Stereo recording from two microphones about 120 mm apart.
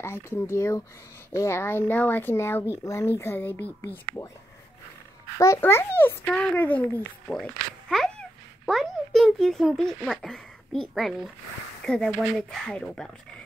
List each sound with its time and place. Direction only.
0.0 s speech: 20° left (ahead or behind)
5.4 s a child's voice: 20° left (ahead or behind)